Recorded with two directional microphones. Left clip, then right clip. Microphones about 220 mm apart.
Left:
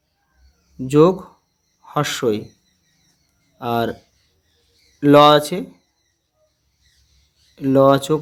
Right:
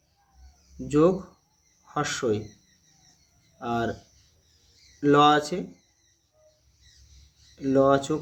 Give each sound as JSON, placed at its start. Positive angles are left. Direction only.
{"t": 0.9, "sound": "speech", "side_deg": 45}
{"t": 3.6, "sound": "speech", "side_deg": 45}
{"t": 4.9, "sound": "speech", "side_deg": 45}
{"t": 7.5, "sound": "speech", "side_deg": 45}